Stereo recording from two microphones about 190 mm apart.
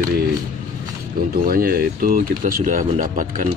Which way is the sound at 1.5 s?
50° right (ahead or behind).